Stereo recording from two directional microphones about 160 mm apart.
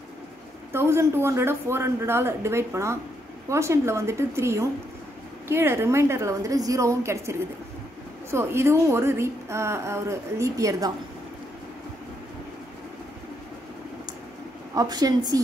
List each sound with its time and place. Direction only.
0.7 s a woman's voice: 15° right (ahead or behind)
14.7 s a woman's voice: 25° right (ahead or behind)